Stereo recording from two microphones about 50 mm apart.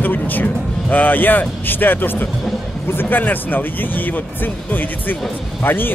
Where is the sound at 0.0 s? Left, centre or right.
Left.